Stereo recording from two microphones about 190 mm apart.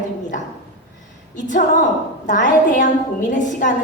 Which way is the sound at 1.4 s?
40° left (ahead or behind).